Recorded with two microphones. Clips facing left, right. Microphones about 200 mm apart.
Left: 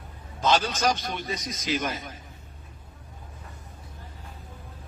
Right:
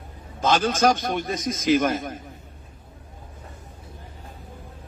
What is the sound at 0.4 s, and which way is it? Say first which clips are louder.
A man's voice: right 4 dB; 50° right (ahead or behind).